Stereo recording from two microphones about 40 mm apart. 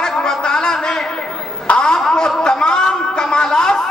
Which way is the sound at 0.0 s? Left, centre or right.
Centre.